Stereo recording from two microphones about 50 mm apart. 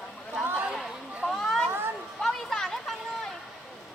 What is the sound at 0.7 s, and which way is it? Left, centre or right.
Chatter, centre.